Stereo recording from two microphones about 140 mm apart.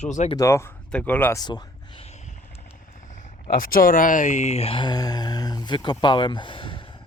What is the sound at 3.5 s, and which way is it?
Speech, 90° left.